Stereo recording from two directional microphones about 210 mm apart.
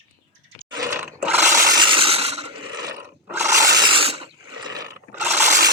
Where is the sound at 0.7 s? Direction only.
15° right (ahead or behind).